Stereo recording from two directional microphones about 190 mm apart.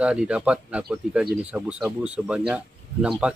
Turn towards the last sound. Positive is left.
turn(degrees=-5)  # may be behind; listen again after turning